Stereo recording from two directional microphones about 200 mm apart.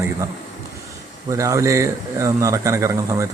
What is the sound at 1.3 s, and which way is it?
Speech, 15° right (ahead or behind).